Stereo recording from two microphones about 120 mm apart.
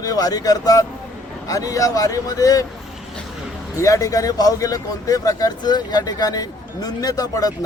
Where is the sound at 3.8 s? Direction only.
25° left (ahead or behind).